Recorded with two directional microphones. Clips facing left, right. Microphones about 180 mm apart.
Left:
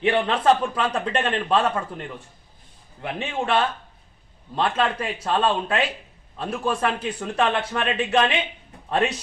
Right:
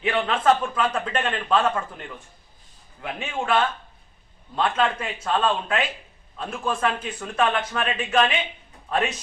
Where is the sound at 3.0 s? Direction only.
35° left (ahead or behind).